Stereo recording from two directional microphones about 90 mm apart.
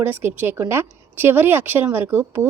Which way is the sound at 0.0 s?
25° right (ahead or behind).